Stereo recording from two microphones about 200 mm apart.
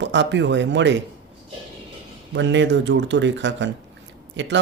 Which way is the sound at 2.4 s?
65° right (ahead or behind).